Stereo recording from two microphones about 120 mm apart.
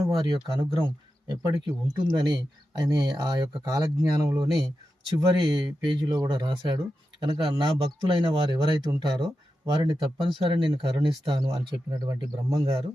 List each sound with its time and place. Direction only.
0.1 s speech: 40° right (ahead or behind)
11.4 s speech: 30° right (ahead or behind)